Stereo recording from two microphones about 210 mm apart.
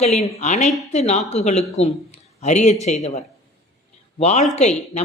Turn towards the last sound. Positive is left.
turn(degrees=30)  # may be behind; listen again after turning